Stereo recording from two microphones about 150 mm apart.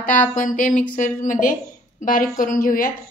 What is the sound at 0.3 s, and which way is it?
A woman's voice, 60° left (ahead or behind).